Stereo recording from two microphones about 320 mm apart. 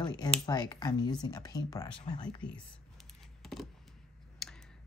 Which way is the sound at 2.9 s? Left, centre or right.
Centre.